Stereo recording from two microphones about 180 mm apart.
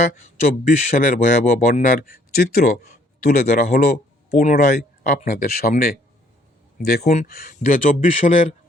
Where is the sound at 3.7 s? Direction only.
55° left (ahead or behind).